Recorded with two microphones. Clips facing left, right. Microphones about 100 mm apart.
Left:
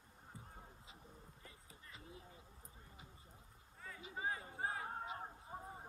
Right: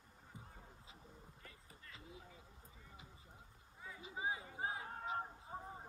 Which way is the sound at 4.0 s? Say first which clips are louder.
Right 1 dB; 20° right (ahead or behind).